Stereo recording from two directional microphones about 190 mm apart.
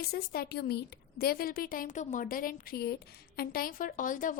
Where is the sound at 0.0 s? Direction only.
55° left (ahead or behind).